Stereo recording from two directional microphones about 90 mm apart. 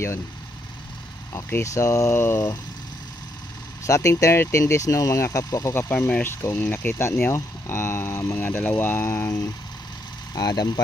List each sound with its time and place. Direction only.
1.3 s speech: 30° left (ahead or behind)
3.8 s speech: 35° left (ahead or behind)
5.8 s speech: 25° left (ahead or behind)
10.3 s speech: 50° left (ahead or behind)